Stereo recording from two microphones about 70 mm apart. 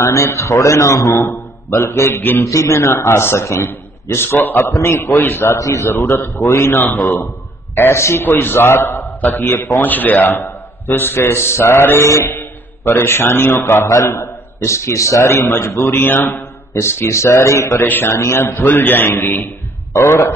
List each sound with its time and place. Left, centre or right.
0.0 s a man's voice: left
5.6 s a man's voice: left
13.8 s a man's voice: left
16.0 s a man's voice: left
16.8 s a man's voice: left
17.8 s a man's voice: left